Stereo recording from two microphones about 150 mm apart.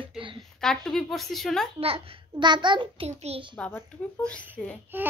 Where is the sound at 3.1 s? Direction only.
45° right (ahead or behind).